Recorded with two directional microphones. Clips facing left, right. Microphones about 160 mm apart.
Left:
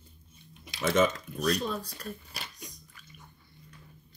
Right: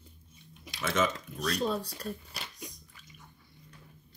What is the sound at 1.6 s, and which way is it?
Speech, 30° right (ahead or behind).